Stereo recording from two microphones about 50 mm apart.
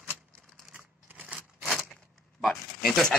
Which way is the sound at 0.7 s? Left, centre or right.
Right.